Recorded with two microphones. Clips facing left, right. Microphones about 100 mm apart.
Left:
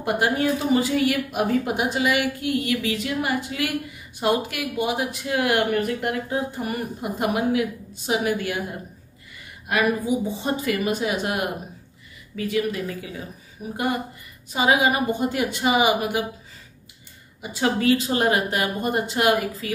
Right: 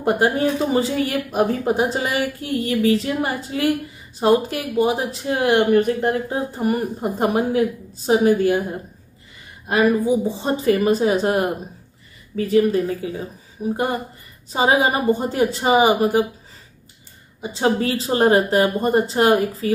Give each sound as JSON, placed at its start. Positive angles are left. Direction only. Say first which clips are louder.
{"t": 0.0, "sound": "speech", "louder": "right 4 dB", "side_deg": -30}
{"t": 9.7, "sound": "speech", "louder": "right 5 dB", "side_deg": -35}
{"t": 17.4, "sound": "speech", "louder": "right 3 dB", "side_deg": -30}